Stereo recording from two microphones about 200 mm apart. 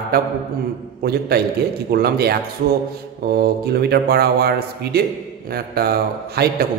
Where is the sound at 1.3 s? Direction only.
50° right (ahead or behind).